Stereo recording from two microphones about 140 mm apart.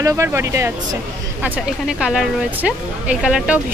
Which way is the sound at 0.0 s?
20° right (ahead or behind).